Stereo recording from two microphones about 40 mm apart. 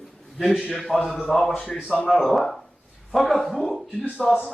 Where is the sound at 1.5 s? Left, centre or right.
Left.